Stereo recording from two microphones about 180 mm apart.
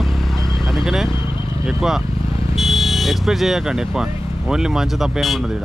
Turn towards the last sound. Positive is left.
turn(degrees=0)  # may be behind; listen again after turning